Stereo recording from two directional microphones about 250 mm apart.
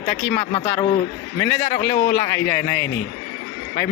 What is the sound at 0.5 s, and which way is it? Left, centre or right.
Speech, left.